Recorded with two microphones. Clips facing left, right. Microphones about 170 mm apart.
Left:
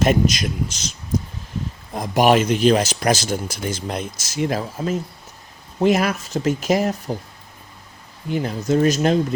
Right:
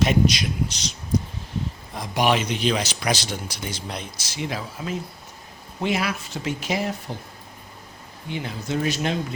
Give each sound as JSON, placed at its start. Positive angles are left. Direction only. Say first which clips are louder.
{"t": 0.0, "sound": "a man's voice", "louder": "left 2 dB", "side_deg": 45}
{"t": 2.0, "sound": "a man's voice", "louder": "left 6 dB", "side_deg": 45}
{"t": 8.3, "sound": "a man's voice", "louder": "left 8 dB", "side_deg": 40}